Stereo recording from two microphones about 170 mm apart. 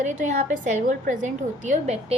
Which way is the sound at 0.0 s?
45° right (ahead or behind).